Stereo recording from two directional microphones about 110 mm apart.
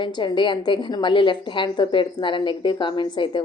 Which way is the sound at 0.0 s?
45° left (ahead or behind).